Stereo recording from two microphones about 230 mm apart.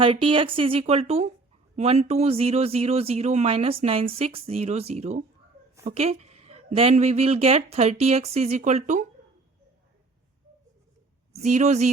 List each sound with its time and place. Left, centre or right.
0.0 s speech: right
11.3 s speech: right